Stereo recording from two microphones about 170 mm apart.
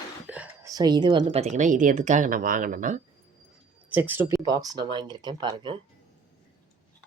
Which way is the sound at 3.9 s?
10° right (ahead or behind).